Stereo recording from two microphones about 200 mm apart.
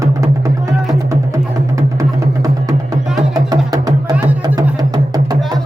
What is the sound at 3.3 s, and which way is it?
Music, 20° right (ahead or behind).